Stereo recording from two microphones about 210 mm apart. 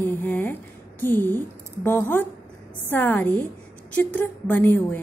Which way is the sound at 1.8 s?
10° left (ahead or behind).